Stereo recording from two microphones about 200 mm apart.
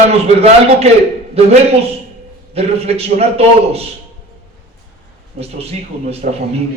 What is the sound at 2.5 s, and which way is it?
A man's voice, 30° right (ahead or behind).